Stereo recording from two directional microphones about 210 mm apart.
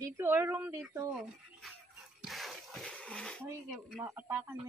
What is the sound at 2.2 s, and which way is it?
Splash, centre (ahead or behind).